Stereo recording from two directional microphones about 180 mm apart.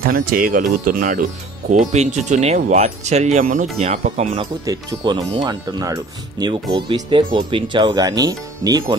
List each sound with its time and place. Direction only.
0.0 s speech: 55° right (ahead or behind); by 4.5 s 35° right (ahead or behind)
4.6 s speech: 25° right (ahead or behind)